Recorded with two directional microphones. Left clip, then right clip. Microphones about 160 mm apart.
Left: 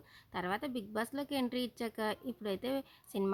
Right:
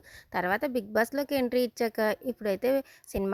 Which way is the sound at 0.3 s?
40° right (ahead or behind).